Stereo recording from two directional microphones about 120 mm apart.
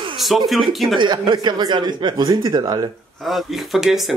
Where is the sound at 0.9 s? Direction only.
40° right (ahead or behind).